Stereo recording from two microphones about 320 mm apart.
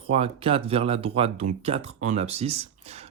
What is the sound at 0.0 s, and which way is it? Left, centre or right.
Speech, centre.